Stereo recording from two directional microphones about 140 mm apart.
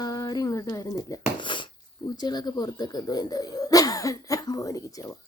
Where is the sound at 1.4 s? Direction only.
35° left (ahead or behind).